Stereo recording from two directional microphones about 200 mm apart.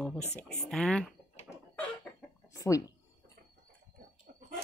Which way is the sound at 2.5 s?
15° left (ahead or behind).